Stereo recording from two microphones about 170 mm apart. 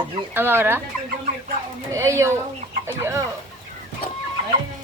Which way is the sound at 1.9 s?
15° right (ahead or behind).